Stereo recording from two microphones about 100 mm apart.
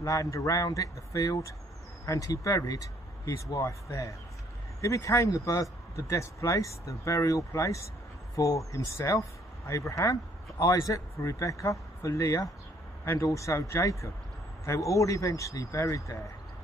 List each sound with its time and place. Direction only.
0.0 s speech: 30° left (ahead or behind)